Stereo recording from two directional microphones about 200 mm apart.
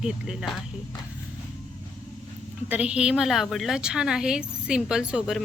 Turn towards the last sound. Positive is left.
turn(degrees=-5)  # may be behind; listen again after turning